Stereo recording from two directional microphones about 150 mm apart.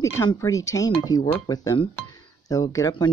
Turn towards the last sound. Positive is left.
turn(degrees=25)  # may be behind; listen again after turning